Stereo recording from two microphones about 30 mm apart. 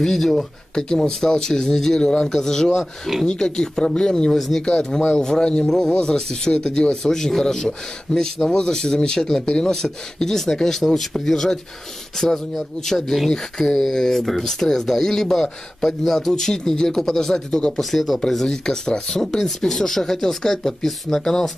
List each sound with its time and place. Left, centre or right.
0.0 s speech: centre
0.7 s a man's voice: left
2.8 s speech: centre
3.3 s a man's voice: left
4.3 s speech: centre
4.6 s a man's voice: left
7.0 s a man's voice: centre
16.2 s speech: centre
17.5 s a man's voice: left
17.7 s speech: centre
18.4 s speech: left